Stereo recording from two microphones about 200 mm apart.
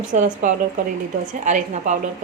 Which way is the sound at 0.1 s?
40° right (ahead or behind).